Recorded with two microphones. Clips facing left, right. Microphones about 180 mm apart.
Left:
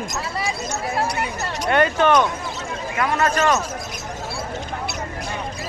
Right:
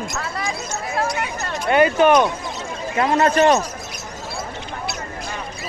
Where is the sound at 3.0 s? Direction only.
30° right (ahead or behind).